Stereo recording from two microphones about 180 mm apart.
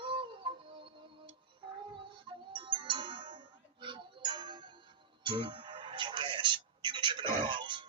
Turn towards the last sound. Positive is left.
turn(degrees=-25)  # may be behind; listen again after turning